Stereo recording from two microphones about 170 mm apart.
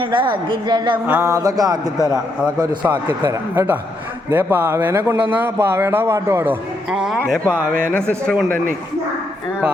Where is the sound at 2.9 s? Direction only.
15° right (ahead or behind).